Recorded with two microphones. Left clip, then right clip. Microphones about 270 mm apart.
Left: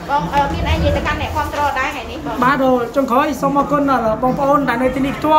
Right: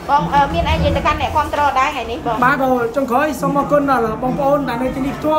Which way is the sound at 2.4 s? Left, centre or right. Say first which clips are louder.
Left 1 dB; centre.